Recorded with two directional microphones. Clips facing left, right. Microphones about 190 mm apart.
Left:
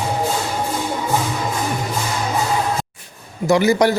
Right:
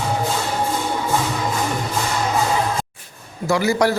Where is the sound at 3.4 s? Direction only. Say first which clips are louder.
Left 3 dB; 20° left (ahead or behind).